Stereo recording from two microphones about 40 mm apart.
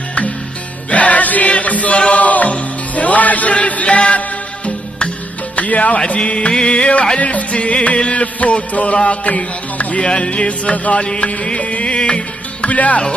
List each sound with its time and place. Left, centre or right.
0.8 s music: left
5.6 s speech: left
5.9 s music: left
10.0 s music: left
12.6 s speech: left